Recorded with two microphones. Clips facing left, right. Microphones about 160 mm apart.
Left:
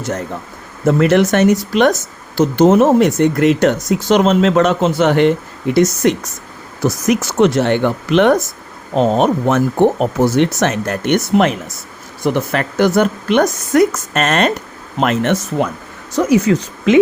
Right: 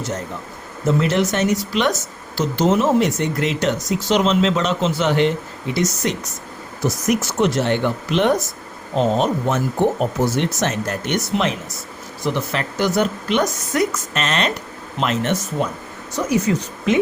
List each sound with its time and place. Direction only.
0.9 s speech: 60° left (ahead or behind)
7.1 s speech: 75° left (ahead or behind)
16.1 s speech: 90° left